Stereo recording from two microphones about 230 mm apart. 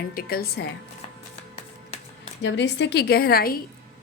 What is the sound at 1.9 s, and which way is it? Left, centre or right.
Music, left.